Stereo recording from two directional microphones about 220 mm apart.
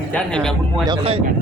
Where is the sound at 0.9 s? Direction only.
25° right (ahead or behind).